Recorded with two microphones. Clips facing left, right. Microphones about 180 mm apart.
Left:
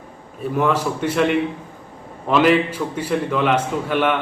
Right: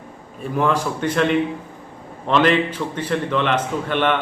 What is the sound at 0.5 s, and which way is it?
A man's voice, 5° left (ahead or behind).